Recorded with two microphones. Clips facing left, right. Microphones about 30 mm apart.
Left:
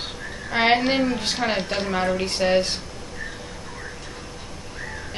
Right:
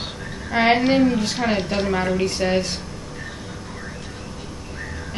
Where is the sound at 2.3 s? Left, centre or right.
Centre.